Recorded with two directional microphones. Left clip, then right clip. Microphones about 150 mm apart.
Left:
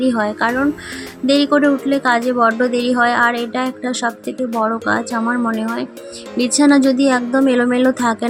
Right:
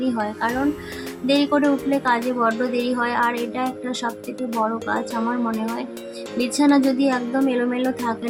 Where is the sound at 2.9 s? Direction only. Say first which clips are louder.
Left 8 dB; 35° left (ahead or behind).